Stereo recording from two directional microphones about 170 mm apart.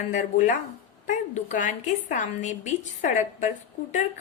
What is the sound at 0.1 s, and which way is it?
A woman's voice, 50° left (ahead or behind).